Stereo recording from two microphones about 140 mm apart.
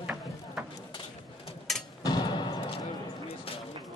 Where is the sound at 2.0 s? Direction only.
30° left (ahead or behind).